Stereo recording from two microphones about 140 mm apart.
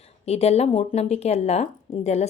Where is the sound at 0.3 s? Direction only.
50° left (ahead or behind).